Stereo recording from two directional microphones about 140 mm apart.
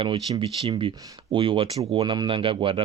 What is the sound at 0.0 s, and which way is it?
Speech, 40° right (ahead or behind).